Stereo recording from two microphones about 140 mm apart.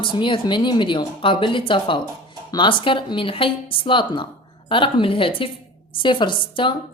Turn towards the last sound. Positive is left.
turn(degrees=35)  # may be behind; listen again after turning